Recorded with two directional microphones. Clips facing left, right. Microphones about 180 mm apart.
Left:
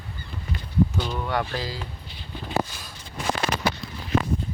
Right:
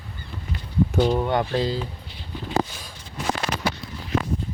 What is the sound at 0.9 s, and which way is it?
Speech, 45° right (ahead or behind).